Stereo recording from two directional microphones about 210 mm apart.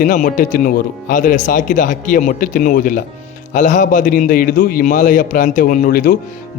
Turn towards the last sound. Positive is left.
turn(degrees=40)  # may be behind; listen again after turning